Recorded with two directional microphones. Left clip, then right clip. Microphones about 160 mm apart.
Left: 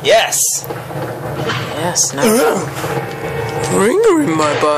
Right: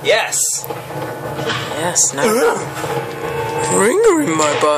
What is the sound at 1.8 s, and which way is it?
Speech, 5° right (ahead or behind).